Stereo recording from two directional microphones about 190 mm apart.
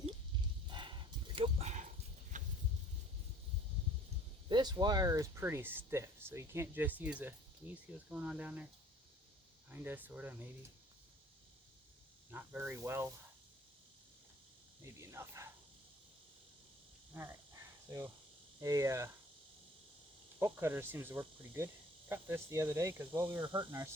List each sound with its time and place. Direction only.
0.7 s dog: 25° right (ahead or behind)
2.3 s a sound: 40° right (ahead or behind)
4.4 s speech: 20° right (ahead or behind); by 8.6 s 5° right (ahead or behind)
9.6 s speech: 10° right (ahead or behind)
12.3 s speech: 10° right (ahead or behind)
14.8 s snake: 15° right (ahead or behind)
17.2 s a sound: 15° right (ahead or behind)
18.6 s speech: 15° right (ahead or behind)
20.4 s speech: 15° right (ahead or behind)